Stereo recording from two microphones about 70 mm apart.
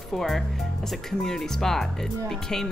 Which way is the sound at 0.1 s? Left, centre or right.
Centre.